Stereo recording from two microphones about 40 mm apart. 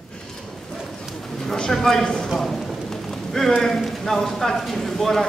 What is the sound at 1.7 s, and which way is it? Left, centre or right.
Speech, centre.